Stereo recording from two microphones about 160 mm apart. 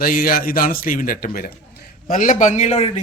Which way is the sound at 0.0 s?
65° left (ahead or behind).